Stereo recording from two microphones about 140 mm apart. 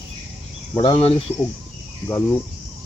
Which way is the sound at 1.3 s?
10° right (ahead or behind).